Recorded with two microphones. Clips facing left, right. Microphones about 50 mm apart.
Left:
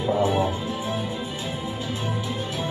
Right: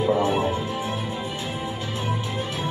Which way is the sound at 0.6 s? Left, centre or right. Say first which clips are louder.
Right 1 dB; right.